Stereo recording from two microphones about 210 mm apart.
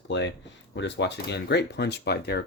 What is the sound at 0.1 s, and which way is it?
Speech, 60° left (ahead or behind).